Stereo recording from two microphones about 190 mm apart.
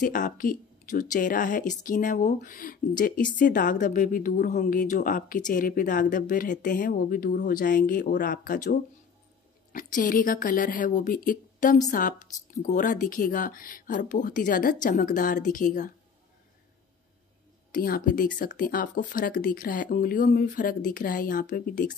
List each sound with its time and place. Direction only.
0.0 s speech: 45° left (ahead or behind)
17.6 s speech: 50° left (ahead or behind)